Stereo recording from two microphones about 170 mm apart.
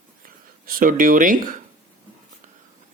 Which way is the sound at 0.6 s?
55° right (ahead or behind).